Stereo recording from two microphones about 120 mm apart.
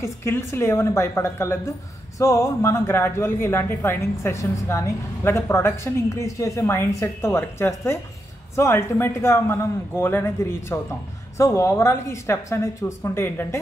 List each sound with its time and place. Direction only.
0.0 s speech: 20° left (ahead or behind)